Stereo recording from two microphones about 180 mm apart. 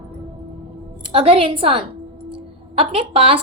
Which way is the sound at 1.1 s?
30° right (ahead or behind).